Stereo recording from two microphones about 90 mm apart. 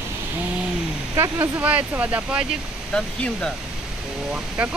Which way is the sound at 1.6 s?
15° right (ahead or behind).